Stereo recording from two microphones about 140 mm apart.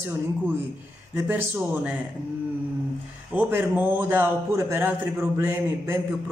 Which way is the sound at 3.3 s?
15° right (ahead or behind).